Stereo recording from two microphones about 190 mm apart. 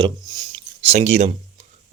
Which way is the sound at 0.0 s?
25° right (ahead or behind).